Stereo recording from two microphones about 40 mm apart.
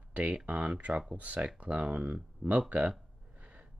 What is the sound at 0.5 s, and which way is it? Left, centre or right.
Speech, right.